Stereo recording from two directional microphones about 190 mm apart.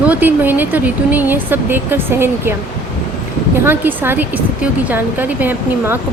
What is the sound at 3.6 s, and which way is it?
Speech, 10° right (ahead or behind).